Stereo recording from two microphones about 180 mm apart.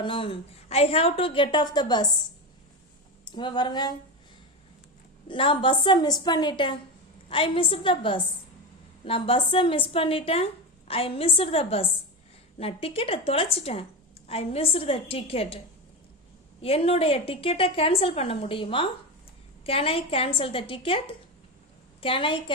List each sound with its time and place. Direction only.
0.0 s a woman's voice: 30° left (ahead or behind)
3.2 s a woman's voice: 25° left (ahead or behind)
5.3 s a woman's voice: 30° left (ahead or behind)